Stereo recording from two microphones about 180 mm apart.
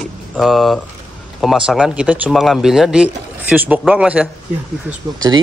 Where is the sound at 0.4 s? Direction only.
Centre (ahead or behind).